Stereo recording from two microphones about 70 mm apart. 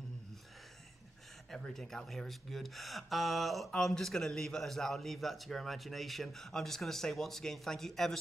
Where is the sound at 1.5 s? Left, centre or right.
Centre.